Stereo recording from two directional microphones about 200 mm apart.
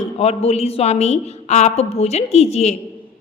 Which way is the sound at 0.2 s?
30° left (ahead or behind).